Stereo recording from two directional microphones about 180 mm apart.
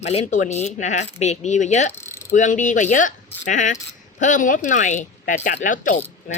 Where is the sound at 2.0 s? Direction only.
15° left (ahead or behind).